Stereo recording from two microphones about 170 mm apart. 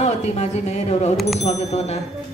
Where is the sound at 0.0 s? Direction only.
40° left (ahead or behind).